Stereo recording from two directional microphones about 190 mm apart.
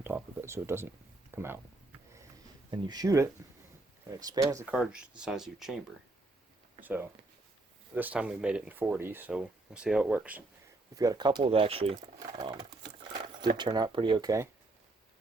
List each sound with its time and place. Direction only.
0.0 s a sound: 10° right (ahead or behind)
1.4 s speech: 10° right (ahead or behind)
2.6 s speech: 20° right (ahead or behind)
4.6 s speech: 5° right (ahead or behind)
6.8 s speech: 10° right (ahead or behind)
10.9 s speech: 20° right (ahead or behind)